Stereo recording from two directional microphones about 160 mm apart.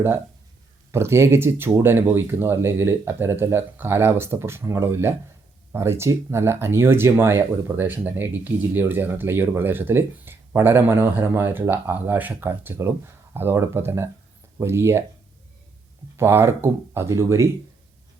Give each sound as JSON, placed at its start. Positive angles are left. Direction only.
{"t": 0.9, "sound": "speech", "side_deg": -15}
{"t": 16.1, "sound": "speech", "side_deg": -15}